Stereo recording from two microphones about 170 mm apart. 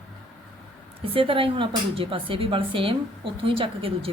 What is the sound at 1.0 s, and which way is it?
Speech, 30° right (ahead or behind).